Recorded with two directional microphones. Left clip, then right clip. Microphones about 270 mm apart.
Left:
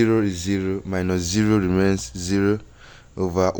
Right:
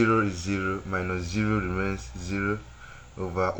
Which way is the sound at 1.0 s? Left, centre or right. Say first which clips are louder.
Left 7 dB; left.